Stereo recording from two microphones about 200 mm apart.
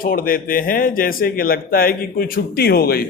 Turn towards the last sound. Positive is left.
turn(degrees=50)  # may be behind; listen again after turning